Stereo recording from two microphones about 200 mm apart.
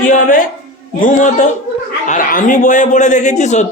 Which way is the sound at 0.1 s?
40° left (ahead or behind).